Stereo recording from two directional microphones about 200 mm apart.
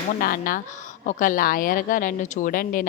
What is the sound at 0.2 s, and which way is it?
A woman's voice, 45° left (ahead or behind).